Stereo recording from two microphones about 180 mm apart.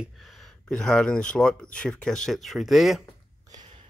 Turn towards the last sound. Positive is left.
turn(degrees=-25)  # may be behind; listen again after turning